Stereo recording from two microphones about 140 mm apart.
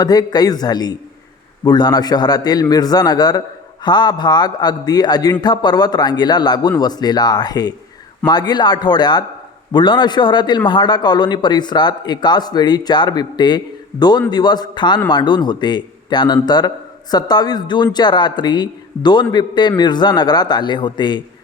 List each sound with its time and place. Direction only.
0.0 s a man's voice: 30° left (ahead or behind)